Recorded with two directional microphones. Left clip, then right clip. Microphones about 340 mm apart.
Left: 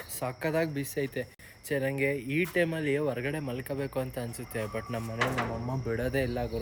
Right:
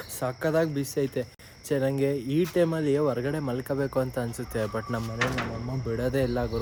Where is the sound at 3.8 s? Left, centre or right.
Centre.